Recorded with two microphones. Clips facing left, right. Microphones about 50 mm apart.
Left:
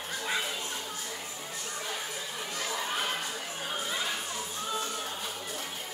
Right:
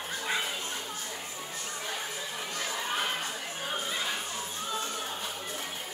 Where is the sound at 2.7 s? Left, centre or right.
Centre.